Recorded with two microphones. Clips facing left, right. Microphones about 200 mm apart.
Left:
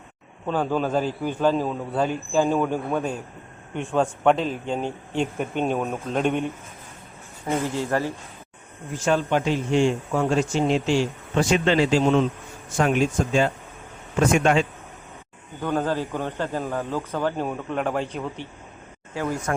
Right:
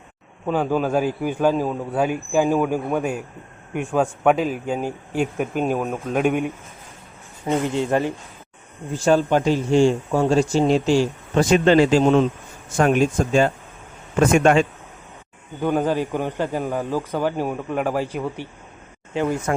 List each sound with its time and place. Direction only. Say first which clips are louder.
0.4 s a man's voice: right 3 dB; 10° right (ahead or behind)
8.9 s speech: right 4 dB; 35° right (ahead or behind); by 14.7 s 50° right (ahead or behind)
15.6 s a man's voice: right 4 dB; 15° right (ahead or behind)
19.1 s speech: right 4 dB; 20° right (ahead or behind)